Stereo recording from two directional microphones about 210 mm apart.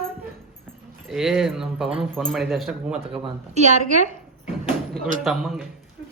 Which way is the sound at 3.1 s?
35° right (ahead or behind).